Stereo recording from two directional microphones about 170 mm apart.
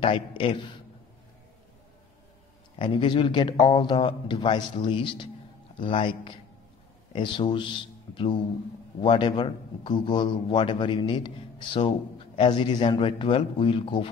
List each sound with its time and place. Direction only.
0.0 s a man's voice: 30° left (ahead or behind)
2.8 s a man's voice: 30° left (ahead or behind)